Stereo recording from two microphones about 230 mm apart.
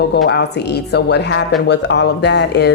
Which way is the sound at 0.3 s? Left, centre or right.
Left.